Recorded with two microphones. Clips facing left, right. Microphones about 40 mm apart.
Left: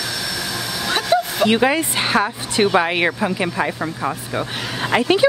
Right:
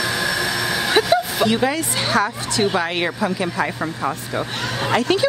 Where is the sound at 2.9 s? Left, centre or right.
Centre.